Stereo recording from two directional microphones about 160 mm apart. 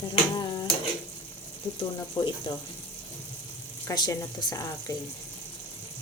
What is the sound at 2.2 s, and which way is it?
Speech, 30° left (ahead or behind).